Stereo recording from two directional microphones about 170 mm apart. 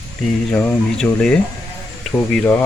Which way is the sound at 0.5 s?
10° left (ahead or behind).